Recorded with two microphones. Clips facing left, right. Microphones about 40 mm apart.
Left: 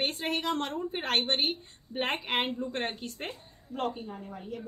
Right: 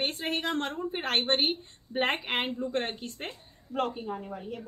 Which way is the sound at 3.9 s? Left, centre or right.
Centre.